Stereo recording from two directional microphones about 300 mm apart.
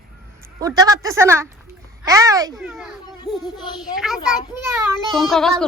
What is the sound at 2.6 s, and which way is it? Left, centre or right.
A child's voice, centre.